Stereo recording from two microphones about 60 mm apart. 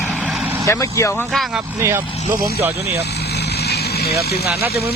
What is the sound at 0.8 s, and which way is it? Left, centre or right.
Speech, left.